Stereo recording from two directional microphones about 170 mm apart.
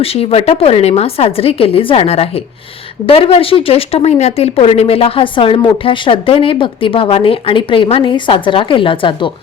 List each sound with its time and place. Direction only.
0.0 s speech: 35° left (ahead or behind)